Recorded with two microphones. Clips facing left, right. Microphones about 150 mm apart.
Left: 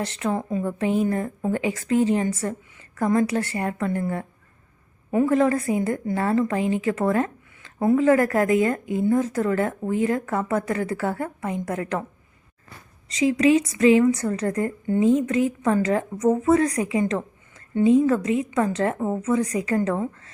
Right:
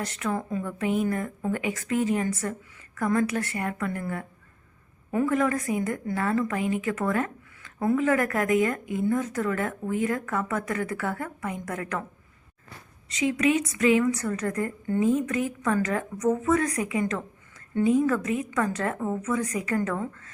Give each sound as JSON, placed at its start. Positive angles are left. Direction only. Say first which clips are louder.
{"t": 0.0, "sound": "a woman's voice", "louder": "left 4 dB", "side_deg": 30}
{"t": 13.1, "sound": "a woman's voice", "louder": "left 5 dB", "side_deg": 30}